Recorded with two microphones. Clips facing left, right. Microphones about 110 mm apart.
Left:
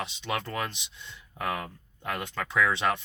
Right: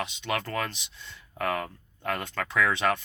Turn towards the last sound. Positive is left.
turn(degrees=25)  # may be behind; listen again after turning